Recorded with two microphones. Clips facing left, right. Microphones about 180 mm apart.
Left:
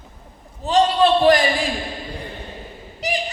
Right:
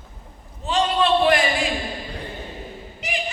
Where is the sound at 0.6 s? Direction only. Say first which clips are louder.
Left 4 dB; 35° left (ahead or behind).